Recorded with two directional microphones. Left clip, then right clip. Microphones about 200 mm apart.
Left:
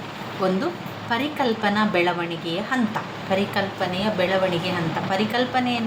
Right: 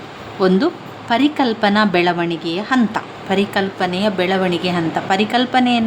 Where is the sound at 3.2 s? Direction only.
55° right (ahead or behind).